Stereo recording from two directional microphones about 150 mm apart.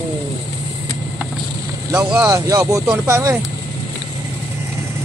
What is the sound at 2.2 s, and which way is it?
Speech, 20° right (ahead or behind).